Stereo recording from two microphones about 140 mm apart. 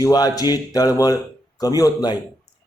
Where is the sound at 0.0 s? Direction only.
25° left (ahead or behind).